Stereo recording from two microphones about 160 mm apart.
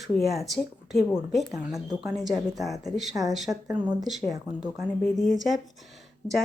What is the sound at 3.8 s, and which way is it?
Speech, 50° right (ahead or behind).